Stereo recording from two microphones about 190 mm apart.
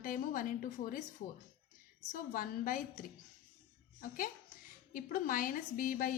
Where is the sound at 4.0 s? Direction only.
50° left (ahead or behind).